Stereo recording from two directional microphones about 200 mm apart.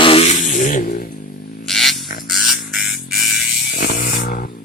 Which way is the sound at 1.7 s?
Centre (ahead or behind).